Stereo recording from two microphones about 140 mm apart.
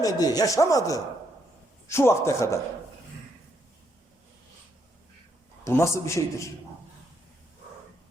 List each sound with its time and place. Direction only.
0.0 s speech: 25° left (ahead or behind)
5.6 s speech: 20° left (ahead or behind)